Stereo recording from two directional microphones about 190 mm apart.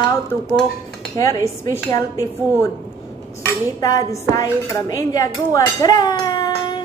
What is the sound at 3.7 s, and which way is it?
Dishes, 20° left (ahead or behind).